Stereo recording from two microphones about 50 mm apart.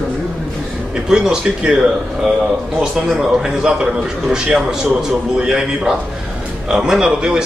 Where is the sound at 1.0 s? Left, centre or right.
Centre.